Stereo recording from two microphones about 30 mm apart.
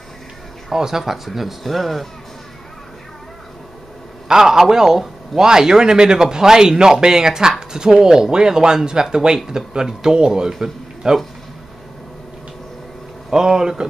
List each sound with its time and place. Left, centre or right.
0.7 s speech: centre
4.3 s a man's voice: centre
13.3 s a man's voice: centre